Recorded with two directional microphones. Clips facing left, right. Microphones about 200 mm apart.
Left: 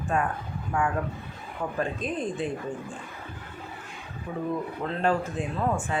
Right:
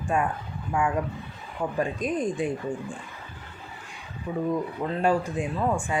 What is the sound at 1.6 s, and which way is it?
Speech, 10° right (ahead or behind).